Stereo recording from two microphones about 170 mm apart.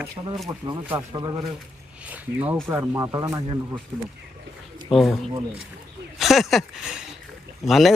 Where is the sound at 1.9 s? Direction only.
10° right (ahead or behind).